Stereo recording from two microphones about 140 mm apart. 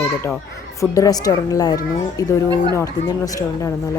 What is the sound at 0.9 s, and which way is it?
A woman's voice, 25° left (ahead or behind).